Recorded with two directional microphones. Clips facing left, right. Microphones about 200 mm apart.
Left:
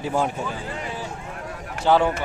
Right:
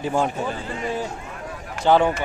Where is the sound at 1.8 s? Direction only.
5° left (ahead or behind).